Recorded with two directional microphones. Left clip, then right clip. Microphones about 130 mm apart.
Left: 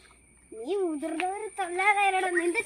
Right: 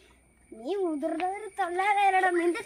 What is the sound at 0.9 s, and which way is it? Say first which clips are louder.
A woman's voice: right 1 dB; 10° right (ahead or behind).